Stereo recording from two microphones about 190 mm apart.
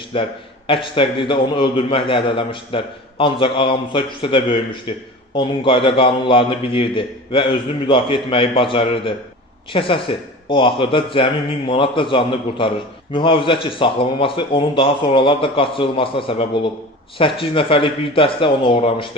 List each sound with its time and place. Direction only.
0.1 s a man's voice: 25° left (ahead or behind)